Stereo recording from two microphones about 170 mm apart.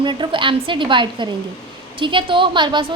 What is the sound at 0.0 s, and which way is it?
Speech, 30° right (ahead or behind).